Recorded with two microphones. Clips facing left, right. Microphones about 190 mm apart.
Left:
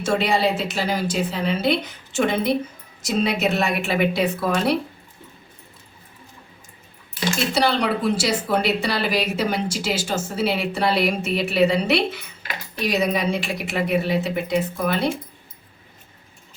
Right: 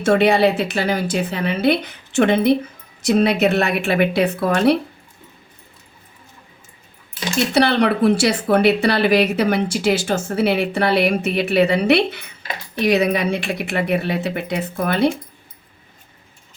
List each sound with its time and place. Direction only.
0.0 s speech: 60° right (ahead or behind)
7.5 s speech: 60° right (ahead or behind)